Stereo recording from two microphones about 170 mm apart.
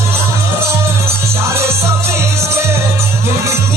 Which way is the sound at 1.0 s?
15° right (ahead or behind).